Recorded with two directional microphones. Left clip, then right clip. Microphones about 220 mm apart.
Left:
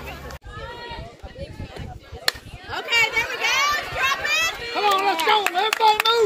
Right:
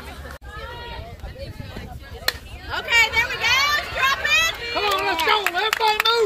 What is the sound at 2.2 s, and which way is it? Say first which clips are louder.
Chop: left 1 dB; centre (ahead or behind).